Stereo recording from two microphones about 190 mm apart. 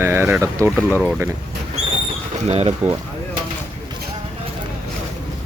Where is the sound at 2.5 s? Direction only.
35° right (ahead or behind).